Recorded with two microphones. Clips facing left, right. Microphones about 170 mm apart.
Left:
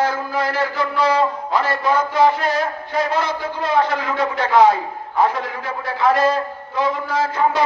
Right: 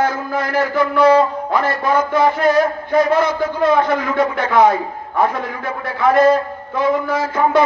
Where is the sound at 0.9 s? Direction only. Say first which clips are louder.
Right 7 dB; 55° right (ahead or behind).